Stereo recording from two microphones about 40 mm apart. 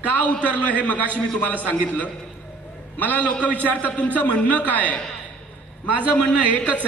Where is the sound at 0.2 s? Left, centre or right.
Left.